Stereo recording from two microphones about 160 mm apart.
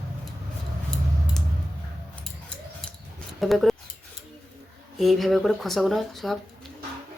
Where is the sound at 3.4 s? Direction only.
Centre (ahead or behind).